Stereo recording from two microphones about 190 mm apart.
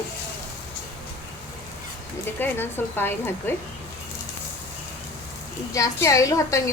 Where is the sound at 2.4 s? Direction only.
10° left (ahead or behind).